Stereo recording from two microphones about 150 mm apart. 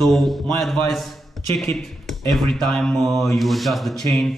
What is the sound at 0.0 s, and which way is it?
Speech, centre (ahead or behind).